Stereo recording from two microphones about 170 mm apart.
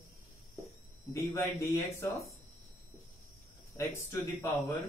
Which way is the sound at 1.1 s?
15° left (ahead or behind).